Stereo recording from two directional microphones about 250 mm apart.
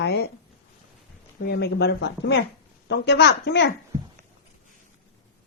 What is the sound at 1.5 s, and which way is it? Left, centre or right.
Speech, left.